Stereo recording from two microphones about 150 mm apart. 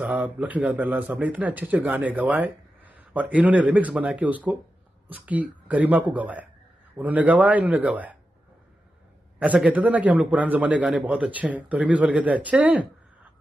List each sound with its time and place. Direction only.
0.0 s speech: 10° right (ahead or behind)
9.4 s speech: 10° right (ahead or behind)